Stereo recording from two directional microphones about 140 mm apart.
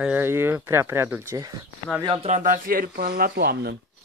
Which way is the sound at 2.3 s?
85° right.